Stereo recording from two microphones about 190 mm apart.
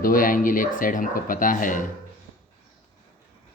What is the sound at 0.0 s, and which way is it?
Speech, 45° left (ahead or behind).